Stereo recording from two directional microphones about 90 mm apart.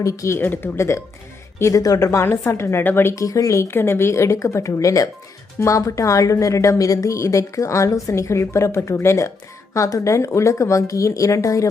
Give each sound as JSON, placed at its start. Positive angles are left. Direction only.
{"t": 0.0, "sound": "a woman's voice", "side_deg": 35}
{"t": 1.8, "sound": "a woman's voice", "side_deg": 40}
{"t": 2.2, "sound": "a woman's voice", "side_deg": 25}
{"t": 3.2, "sound": "a woman's voice", "side_deg": 35}